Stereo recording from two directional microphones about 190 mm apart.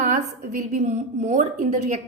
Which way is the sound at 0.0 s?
40° right (ahead or behind).